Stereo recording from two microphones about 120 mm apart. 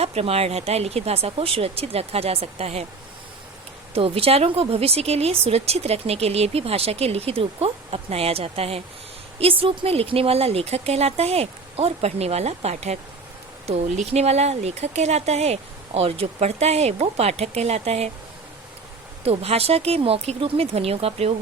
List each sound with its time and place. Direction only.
0.0 s speech: 60° right (ahead or behind)
3.9 s speech: 55° right (ahead or behind)
19.2 s speech: 55° right (ahead or behind)